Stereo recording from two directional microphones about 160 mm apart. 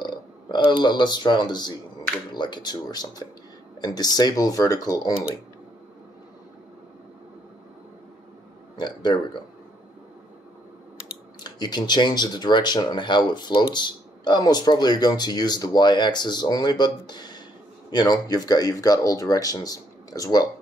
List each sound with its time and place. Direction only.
0.0 s speech: 30° left (ahead or behind)
8.7 s a sound: 25° left (ahead or behind)
11.4 s speech: 25° left (ahead or behind)